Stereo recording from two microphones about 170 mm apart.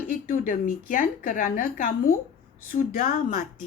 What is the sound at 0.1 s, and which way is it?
A woman's voice, 55° left (ahead or behind).